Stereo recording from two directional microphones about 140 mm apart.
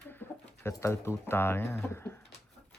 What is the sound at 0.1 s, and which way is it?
Speech, 15° left (ahead or behind).